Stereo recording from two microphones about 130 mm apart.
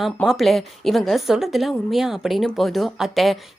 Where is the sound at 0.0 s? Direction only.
Centre (ahead or behind).